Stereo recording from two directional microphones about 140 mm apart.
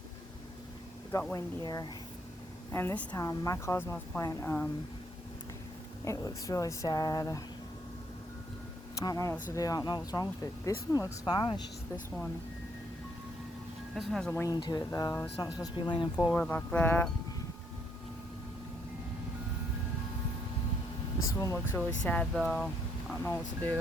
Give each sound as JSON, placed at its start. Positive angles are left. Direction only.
{"t": 1.3, "sound": "speech", "side_deg": 30}
{"t": 2.7, "sound": "speech", "side_deg": 15}
{"t": 3.2, "sound": "speech", "side_deg": 25}
{"t": 6.1, "sound": "speech", "side_deg": 25}
{"t": 9.0, "sound": "speech", "side_deg": 20}
{"t": 13.9, "sound": "speech", "side_deg": 0}
{"t": 14.5, "sound": "speech", "side_deg": 30}
{"t": 15.1, "sound": "speech", "side_deg": 20}
{"t": 15.6, "sound": "speech", "side_deg": 35}
{"t": 16.3, "sound": "speech", "side_deg": 10}
{"t": 21.3, "sound": "speech", "side_deg": 20}
{"t": 21.8, "sound": "speech", "side_deg": 10}
{"t": 22.4, "sound": "a sound", "side_deg": 0}
{"t": 23.2, "sound": "speech", "side_deg": 10}